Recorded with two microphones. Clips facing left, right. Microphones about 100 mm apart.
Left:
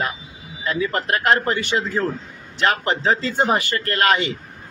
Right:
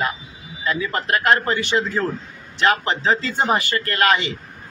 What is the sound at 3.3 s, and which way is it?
Speech, 50° left (ahead or behind).